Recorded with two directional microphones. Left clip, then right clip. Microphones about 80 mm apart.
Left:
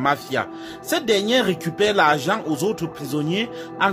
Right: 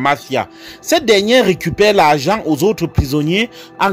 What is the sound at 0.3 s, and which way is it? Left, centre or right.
Speech, right.